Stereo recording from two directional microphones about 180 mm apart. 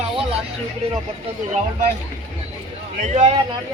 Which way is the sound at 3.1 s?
40° right (ahead or behind).